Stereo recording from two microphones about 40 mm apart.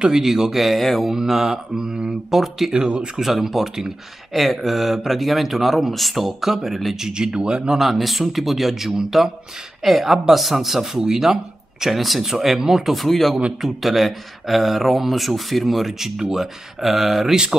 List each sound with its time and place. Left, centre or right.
0.0 s speech: centre
1.1 s mantra: centre
2.3 s speech: centre
2.7 s speech: right
3.2 s mantra: centre
4.3 s speech: centre
7.0 s mantra: centre
7.3 s speech: right
7.8 s speech: centre
11.0 s mantra: centre
11.8 s speech: centre
12.3 s mantra: centre
12.9 s speech: centre